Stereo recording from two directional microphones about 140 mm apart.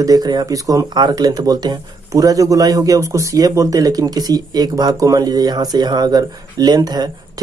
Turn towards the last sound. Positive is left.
turn(degrees=-30)  # may be behind; listen again after turning